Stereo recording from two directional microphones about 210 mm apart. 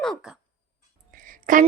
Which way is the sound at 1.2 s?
40° right (ahead or behind).